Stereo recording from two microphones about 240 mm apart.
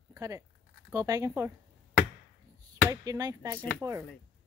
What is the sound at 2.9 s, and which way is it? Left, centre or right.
Speech, centre.